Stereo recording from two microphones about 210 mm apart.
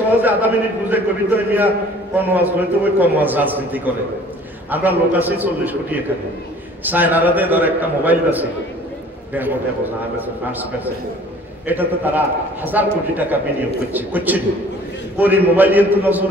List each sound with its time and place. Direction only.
0.2 s a man's voice: 10° right (ahead or behind)